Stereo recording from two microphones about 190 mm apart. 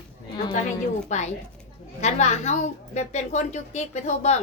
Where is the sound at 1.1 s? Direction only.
35° left (ahead or behind).